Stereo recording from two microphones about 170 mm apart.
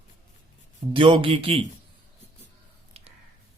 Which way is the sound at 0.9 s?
30° right (ahead or behind).